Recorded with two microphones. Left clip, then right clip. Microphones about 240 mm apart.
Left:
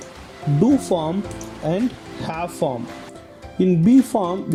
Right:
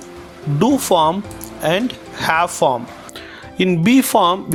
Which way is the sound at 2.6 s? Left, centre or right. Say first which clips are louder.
Right 7 dB; right.